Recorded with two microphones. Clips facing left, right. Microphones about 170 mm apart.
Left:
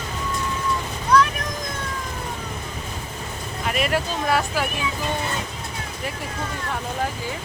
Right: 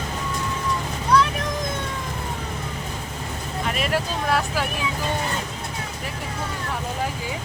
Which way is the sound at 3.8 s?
Centre (ahead or behind).